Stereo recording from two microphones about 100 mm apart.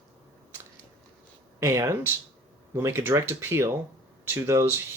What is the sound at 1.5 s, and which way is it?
Speech, 30° right (ahead or behind).